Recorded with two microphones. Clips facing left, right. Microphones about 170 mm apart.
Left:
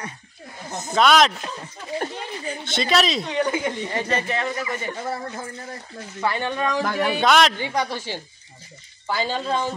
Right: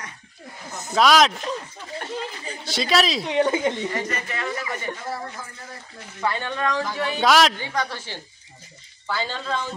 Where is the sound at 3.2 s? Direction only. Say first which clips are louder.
Right 2 dB; 25° right (ahead or behind).